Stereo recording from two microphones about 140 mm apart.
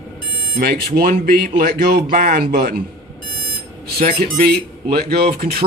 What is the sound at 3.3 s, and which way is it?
Alarm clock, 90° right.